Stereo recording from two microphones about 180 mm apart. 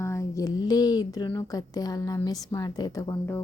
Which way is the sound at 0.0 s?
15° left (ahead or behind).